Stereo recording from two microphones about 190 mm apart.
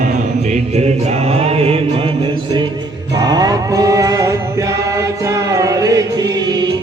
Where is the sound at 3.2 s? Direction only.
20° right (ahead or behind).